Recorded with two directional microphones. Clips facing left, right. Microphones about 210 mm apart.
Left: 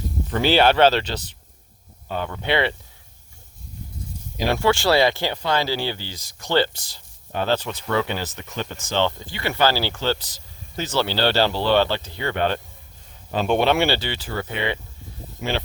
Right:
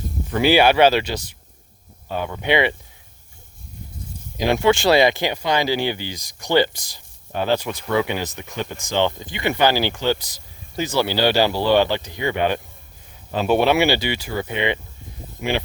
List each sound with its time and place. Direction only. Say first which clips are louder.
0.3 s speech: right 2 dB; 10° right (ahead or behind)
4.5 s speech: right 3 dB; 20° right (ahead or behind)